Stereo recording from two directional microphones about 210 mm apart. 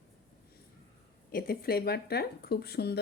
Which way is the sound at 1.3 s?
45° left (ahead or behind).